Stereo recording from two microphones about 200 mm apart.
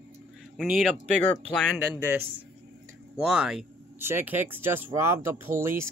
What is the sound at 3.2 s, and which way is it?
Speech, 5° right (ahead or behind).